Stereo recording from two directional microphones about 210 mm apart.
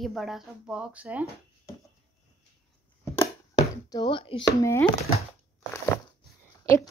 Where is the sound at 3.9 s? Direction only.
20° left (ahead or behind).